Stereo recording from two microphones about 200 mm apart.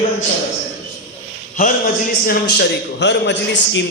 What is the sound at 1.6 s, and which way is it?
A man's voice, 40° left (ahead or behind).